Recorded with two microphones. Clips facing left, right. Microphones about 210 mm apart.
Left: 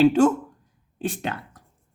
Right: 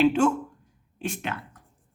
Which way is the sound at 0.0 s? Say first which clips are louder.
Left 4 dB; 40° left (ahead or behind).